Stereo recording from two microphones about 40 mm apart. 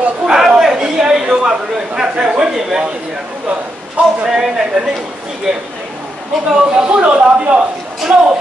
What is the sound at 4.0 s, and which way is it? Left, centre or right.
Speech, right.